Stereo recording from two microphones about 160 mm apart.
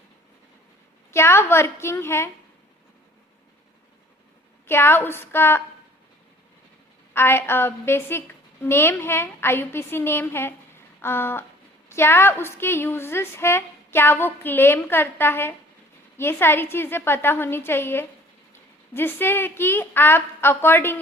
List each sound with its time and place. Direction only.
1.1 s a woman's voice: 15° left (ahead or behind)
4.6 s a woman's voice: 15° left (ahead or behind)
7.1 s a woman's voice: 15° left (ahead or behind)